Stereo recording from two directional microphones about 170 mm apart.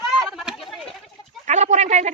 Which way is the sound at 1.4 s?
45° right (ahead or behind).